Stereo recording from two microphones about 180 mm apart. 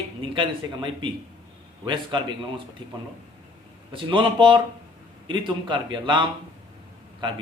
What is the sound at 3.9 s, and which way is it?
A man's voice, 30° right (ahead or behind).